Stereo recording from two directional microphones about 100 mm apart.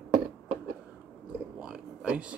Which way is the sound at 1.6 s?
10° right (ahead or behind).